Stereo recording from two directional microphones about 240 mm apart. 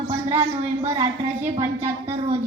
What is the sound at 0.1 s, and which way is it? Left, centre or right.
A woman's voice, centre.